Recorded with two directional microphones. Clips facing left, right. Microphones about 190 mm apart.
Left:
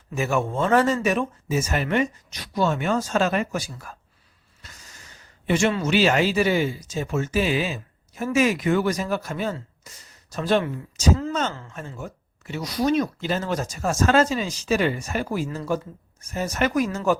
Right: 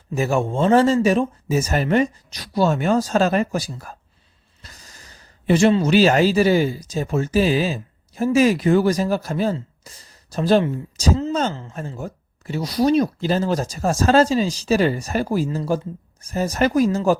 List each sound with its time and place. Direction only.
0.1 s speech: 35° right (ahead or behind)